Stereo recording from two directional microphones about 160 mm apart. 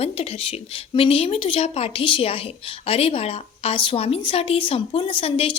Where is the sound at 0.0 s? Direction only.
40° left (ahead or behind).